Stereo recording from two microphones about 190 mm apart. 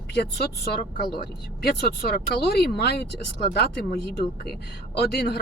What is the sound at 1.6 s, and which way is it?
Speech, 55° left (ahead or behind).